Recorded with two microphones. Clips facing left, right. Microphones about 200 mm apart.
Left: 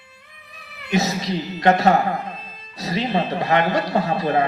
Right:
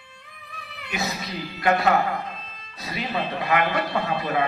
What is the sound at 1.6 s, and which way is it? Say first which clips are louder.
Speech: left 4 dB; 35° left (ahead or behind).